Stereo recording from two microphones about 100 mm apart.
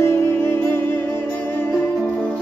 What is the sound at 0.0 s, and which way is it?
Music, 25° left (ahead or behind).